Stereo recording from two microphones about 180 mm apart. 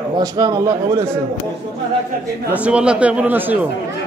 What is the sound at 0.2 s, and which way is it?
Speech, 20° right (ahead or behind).